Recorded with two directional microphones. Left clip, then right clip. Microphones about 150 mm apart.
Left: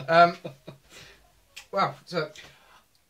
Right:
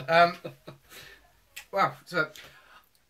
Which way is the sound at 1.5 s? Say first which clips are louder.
Even; centre (ahead or behind).